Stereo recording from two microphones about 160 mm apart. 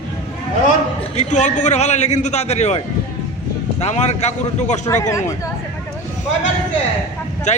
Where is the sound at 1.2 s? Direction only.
50° left (ahead or behind).